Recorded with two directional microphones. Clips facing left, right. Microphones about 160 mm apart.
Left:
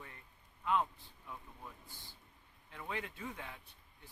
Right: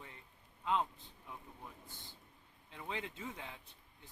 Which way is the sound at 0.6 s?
20° right (ahead or behind).